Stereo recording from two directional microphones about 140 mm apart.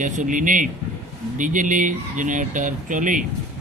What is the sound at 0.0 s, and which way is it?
Speech, 70° right (ahead or behind).